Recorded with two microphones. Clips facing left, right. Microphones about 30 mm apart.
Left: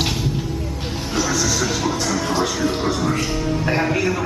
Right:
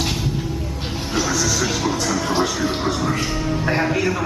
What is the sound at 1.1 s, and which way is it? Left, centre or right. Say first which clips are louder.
Music: even; centre.